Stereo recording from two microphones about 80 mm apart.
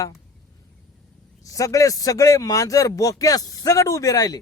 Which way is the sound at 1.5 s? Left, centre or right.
Left.